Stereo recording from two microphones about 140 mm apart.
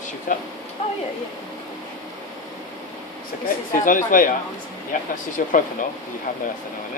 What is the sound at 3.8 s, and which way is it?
Speech, 75° left (ahead or behind).